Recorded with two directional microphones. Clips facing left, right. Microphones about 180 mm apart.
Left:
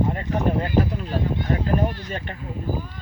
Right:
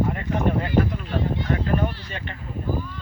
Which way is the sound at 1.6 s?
40° left (ahead or behind).